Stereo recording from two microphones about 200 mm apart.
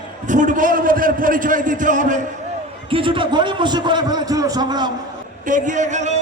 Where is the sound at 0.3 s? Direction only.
40° right (ahead or behind).